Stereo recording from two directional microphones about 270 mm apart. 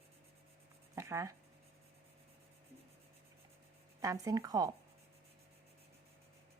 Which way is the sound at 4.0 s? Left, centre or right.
Centre.